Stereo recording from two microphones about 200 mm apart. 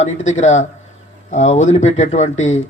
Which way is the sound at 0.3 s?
35° left (ahead or behind).